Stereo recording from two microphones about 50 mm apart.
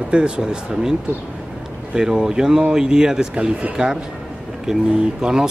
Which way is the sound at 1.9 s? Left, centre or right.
Centre.